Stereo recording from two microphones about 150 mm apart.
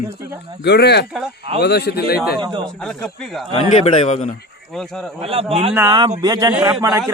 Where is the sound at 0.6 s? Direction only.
90° left.